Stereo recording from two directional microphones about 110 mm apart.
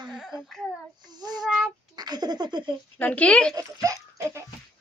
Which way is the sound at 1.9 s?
40° right (ahead or behind).